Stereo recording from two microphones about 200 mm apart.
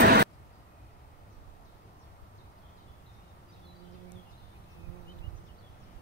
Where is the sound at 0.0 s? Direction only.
50° right (ahead or behind).